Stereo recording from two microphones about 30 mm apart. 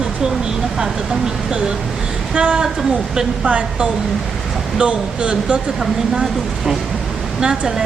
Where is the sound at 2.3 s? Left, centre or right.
Right.